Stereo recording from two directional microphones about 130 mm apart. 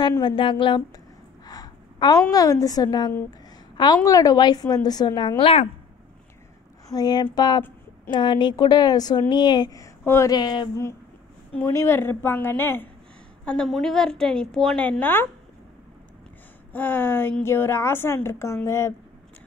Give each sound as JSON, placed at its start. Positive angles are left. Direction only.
{"t": 0.4, "sound": "a woman's voice", "side_deg": 40}
{"t": 1.4, "sound": "a sound", "side_deg": 30}
{"t": 2.3, "sound": "a woman's voice", "side_deg": 25}
{"t": 5.4, "sound": "speech", "side_deg": 50}
{"t": 6.9, "sound": "a woman's voice", "side_deg": 30}
{"t": 10.3, "sound": "a woman's voice", "side_deg": 35}
{"t": 11.5, "sound": "a woman's voice", "side_deg": 20}
{"t": 13.5, "sound": "a woman's voice", "side_deg": 5}
{"t": 14.9, "sound": "a woman's voice", "side_deg": 15}
{"t": 16.7, "sound": "a woman's voice", "side_deg": 15}